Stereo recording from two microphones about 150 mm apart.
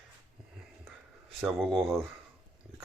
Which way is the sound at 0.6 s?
Centre (ahead or behind).